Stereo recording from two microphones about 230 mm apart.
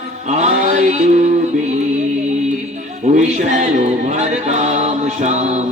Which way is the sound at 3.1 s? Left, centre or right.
Right.